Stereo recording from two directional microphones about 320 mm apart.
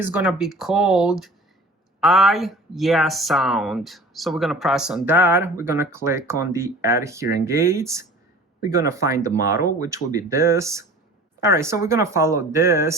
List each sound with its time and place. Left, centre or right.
0.0 s speech: centre